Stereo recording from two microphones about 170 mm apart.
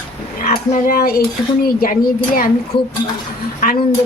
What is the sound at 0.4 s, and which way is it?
Speech, 60° left (ahead or behind).